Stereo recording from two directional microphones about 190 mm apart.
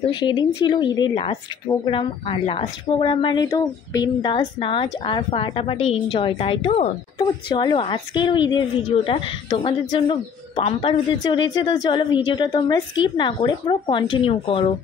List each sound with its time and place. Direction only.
0.1 s a woman's voice: 25° left (ahead or behind)